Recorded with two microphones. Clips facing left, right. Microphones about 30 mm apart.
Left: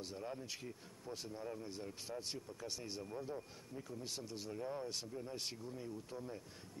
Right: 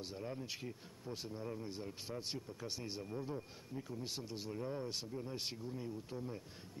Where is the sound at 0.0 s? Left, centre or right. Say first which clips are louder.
Right 1 dB; centre.